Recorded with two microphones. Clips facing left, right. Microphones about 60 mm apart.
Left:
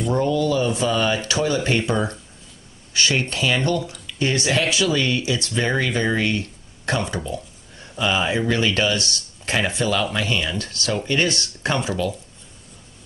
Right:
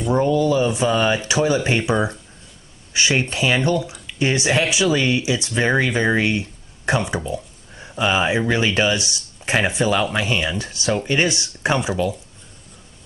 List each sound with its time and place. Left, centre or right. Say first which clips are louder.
0.0 s speech: right 2 dB; centre